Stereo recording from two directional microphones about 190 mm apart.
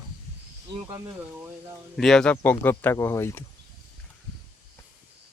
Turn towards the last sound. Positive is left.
turn(degrees=15)  # may be behind; listen again after turning